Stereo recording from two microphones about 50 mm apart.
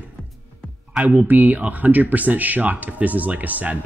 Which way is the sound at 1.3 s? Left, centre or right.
Right.